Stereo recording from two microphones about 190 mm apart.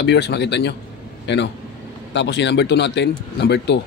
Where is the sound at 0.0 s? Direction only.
65° left (ahead or behind).